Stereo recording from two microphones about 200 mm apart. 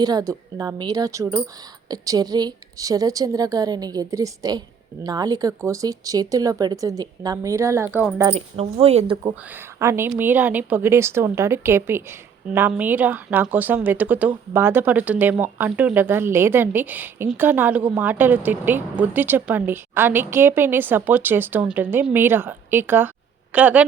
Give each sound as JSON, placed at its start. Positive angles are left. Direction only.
{"t": 0.0, "sound": "a woman's voice", "side_deg": -20}
{"t": 8.2, "sound": "a woman's voice", "side_deg": -25}
{"t": 9.7, "sound": "speech", "side_deg": -15}